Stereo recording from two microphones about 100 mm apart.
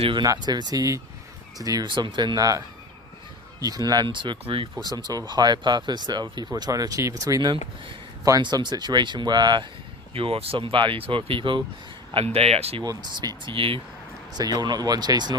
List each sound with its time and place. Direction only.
0.2 s speech: 45° right (ahead or behind)
1.9 s speech: 50° right (ahead or behind)
4.8 s speech: 45° right (ahead or behind)
8.4 s speech: 50° right (ahead or behind)
10.2 s speech: 70° right (ahead or behind)
12.1 s speech: 85° right
12.8 s speech: 45° right (ahead or behind); by 13.8 s 60° right (ahead or behind)
14.3 s speech: 40° right (ahead or behind)